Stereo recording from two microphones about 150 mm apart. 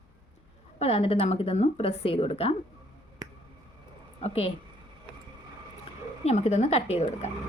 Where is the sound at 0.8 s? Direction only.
40° left (ahead or behind).